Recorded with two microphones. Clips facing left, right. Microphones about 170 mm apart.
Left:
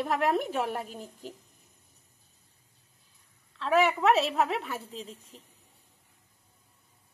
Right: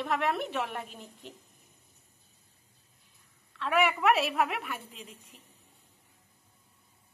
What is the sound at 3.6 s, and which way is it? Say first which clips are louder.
A woman's voice: left 3 dB; 30° left (ahead or behind).